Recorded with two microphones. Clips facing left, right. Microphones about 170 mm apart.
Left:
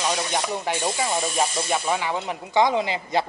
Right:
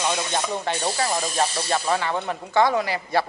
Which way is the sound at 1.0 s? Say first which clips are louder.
Right 1 dB; centre (ahead or behind).